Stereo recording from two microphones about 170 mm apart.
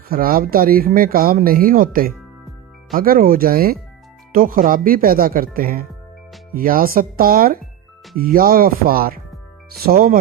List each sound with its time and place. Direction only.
0.1 s speech: 60° right (ahead or behind)